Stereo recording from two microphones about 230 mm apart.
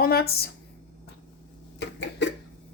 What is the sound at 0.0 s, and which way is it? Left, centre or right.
Speech, left.